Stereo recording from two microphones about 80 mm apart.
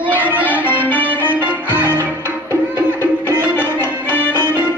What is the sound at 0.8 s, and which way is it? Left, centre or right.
Music, left.